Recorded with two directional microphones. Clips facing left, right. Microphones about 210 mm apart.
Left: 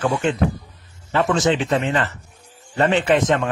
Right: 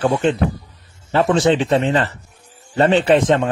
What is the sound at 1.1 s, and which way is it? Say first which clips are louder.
Speech: right 3 dB; 30° right (ahead or behind).